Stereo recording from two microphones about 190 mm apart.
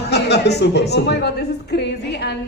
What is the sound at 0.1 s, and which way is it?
A man's voice, 60° left (ahead or behind).